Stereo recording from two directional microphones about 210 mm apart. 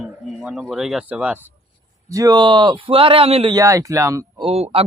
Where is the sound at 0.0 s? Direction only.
Centre (ahead or behind).